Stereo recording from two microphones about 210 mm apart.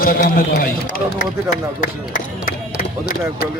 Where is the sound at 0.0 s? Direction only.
45° left (ahead or behind).